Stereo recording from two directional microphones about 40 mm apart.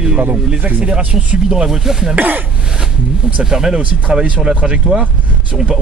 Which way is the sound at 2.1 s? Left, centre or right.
Right.